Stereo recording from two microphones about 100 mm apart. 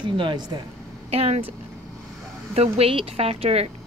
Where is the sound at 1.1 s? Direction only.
90° right.